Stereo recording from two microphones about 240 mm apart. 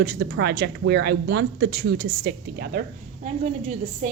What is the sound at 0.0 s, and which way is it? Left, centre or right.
A woman's voice, right.